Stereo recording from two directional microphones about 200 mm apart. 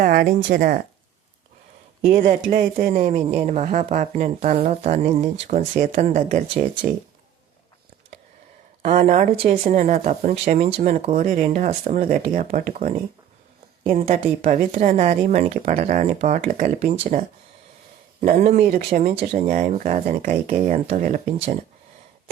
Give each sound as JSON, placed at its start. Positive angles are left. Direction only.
{"t": 0.0, "sound": "a woman's voice", "side_deg": -45}
{"t": 2.0, "sound": "a woman's voice", "side_deg": -40}
{"t": 8.8, "sound": "speech", "side_deg": -35}
{"t": 13.8, "sound": "a woman's voice", "side_deg": -30}
{"t": 18.9, "sound": "speech", "side_deg": -35}